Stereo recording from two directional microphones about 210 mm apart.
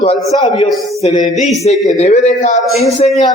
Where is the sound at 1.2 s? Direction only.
Centre (ahead or behind).